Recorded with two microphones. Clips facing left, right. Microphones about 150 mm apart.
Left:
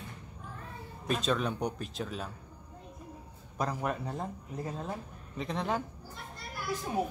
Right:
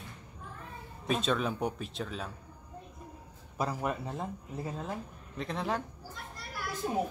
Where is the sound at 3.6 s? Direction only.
5° right (ahead or behind).